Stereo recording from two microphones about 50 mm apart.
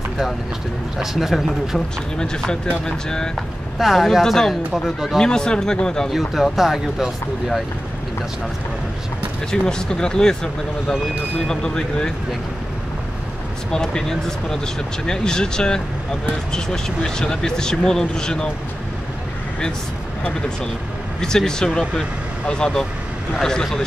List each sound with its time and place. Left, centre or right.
0.9 s speech: centre
2.1 s speech: centre
3.3 s speech: centre
5.2 s speech: centre
6.0 s speech: centre
9.5 s speech: centre
13.7 s speech: centre
21.2 s speech: centre